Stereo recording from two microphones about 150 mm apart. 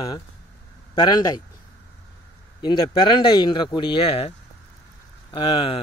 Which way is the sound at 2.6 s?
30° left (ahead or behind).